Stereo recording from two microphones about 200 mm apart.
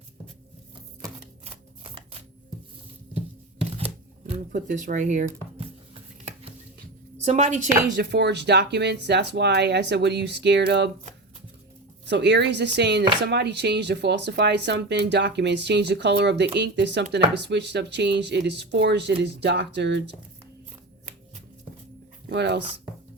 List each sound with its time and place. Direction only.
4.5 s speech: 40° right (ahead or behind)
7.2 s speech: 35° right (ahead or behind)
7.9 s speech: 55° right (ahead or behind)
12.0 s speech: 60° right (ahead or behind)
22.3 s speech: 60° right (ahead or behind)